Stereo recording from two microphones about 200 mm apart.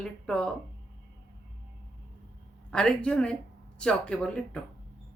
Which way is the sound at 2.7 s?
5° left (ahead or behind).